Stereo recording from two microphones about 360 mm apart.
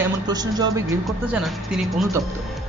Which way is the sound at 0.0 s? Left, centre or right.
Centre.